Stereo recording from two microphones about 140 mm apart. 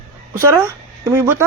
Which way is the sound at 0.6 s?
20° right (ahead or behind).